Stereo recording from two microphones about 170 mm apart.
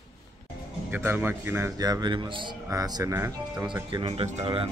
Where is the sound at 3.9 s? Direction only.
35° right (ahead or behind).